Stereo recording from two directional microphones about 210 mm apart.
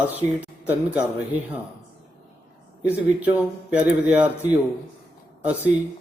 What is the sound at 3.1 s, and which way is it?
Speech, 5° right (ahead or behind).